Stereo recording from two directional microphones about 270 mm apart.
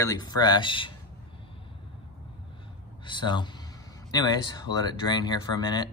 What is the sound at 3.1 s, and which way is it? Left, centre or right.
Speech, centre.